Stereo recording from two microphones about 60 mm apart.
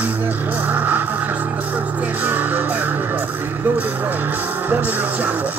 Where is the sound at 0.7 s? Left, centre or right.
Right.